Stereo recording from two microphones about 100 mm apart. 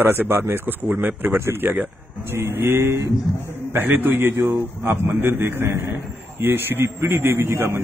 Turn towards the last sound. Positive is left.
turn(degrees=-25)  # may be behind; listen again after turning